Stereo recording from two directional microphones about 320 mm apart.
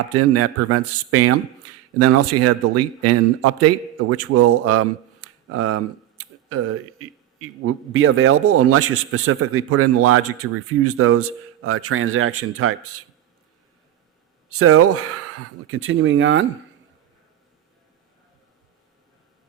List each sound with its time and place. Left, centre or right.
0.1 s speech: right
14.5 s speech: right